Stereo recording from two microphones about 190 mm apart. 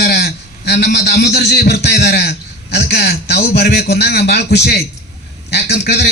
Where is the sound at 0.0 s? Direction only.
60° left (ahead or behind).